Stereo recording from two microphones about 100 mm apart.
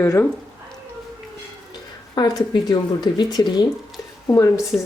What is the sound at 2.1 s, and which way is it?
Speech, 40° left (ahead or behind).